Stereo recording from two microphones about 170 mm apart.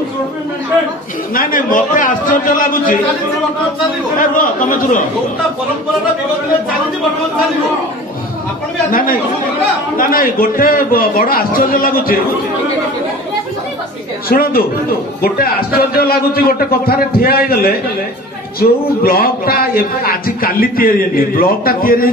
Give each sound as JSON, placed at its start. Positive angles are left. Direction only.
{"t": 1.3, "sound": "a man's voice", "side_deg": 55}
{"t": 4.2, "sound": "a man's voice", "side_deg": 55}
{"t": 8.9, "sound": "a man's voice", "side_deg": 55}
{"t": 14.3, "sound": "speech", "side_deg": 60}